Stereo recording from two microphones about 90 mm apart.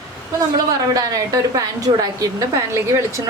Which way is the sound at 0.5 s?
45° right (ahead or behind).